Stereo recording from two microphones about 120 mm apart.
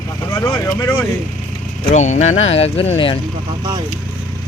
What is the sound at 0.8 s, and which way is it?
Speech, 15° left (ahead or behind).